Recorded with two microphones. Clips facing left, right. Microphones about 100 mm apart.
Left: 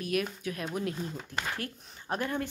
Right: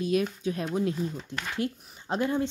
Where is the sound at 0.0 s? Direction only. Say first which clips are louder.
Right 5 dB; 25° right (ahead or behind).